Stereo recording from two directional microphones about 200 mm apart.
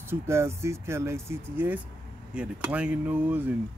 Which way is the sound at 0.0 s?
10° right (ahead or behind).